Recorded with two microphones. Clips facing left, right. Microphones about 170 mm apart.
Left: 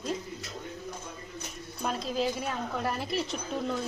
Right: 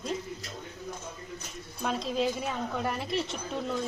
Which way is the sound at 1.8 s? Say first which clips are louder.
Right 1 dB; centre (ahead or behind).